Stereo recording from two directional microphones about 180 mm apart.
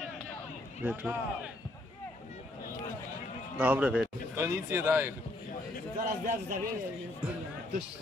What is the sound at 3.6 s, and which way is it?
Speech, 10° right (ahead or behind).